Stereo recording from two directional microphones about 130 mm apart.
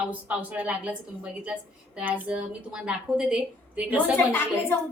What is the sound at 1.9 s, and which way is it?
A woman's voice, 10° right (ahead or behind).